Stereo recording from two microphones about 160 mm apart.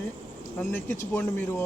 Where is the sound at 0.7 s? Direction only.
10° left (ahead or behind).